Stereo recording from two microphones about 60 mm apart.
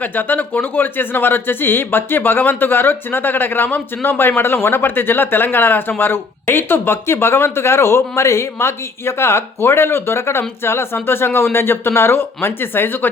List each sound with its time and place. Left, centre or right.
0.0 s speech: left